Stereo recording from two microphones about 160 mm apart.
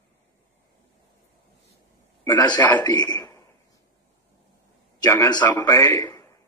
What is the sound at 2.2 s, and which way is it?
A man's voice, 25° left (ahead or behind).